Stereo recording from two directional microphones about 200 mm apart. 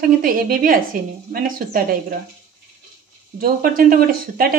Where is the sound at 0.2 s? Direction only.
45° right (ahead or behind).